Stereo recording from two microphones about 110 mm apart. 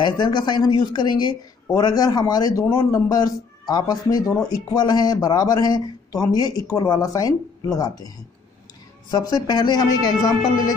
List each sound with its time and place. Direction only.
0.0 s speech: 45° left (ahead or behind)
9.1 s speech: 35° left (ahead or behind)